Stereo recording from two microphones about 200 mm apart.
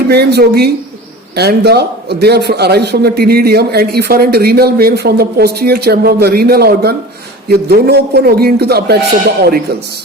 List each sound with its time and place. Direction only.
0.1 s a man's voice: 55° right (ahead or behind)